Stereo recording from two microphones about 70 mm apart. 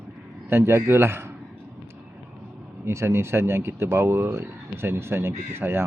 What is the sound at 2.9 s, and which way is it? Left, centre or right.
Speech, right.